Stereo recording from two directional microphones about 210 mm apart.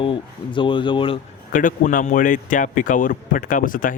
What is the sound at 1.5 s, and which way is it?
A man's voice, 40° left (ahead or behind).